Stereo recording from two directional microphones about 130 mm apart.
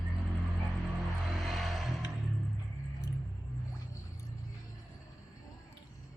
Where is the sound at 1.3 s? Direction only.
Centre (ahead or behind).